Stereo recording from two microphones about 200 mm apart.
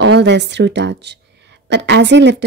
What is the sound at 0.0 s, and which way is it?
Speech, 60° right (ahead or behind).